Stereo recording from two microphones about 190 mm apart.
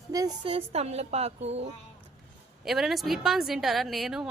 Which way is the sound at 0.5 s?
35° right (ahead or behind).